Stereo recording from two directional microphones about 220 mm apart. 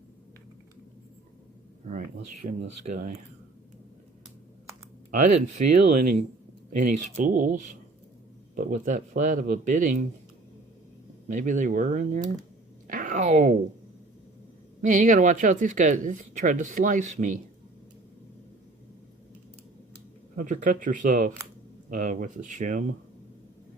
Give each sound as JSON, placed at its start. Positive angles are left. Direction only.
{"t": 2.4, "sound": "speech", "side_deg": -40}
{"t": 5.2, "sound": "speech", "side_deg": -35}
{"t": 11.3, "sound": "speech", "side_deg": -35}
{"t": 12.9, "sound": "a sound", "side_deg": -35}
{"t": 14.8, "sound": "speech", "side_deg": -35}
{"t": 20.3, "sound": "speech", "side_deg": -35}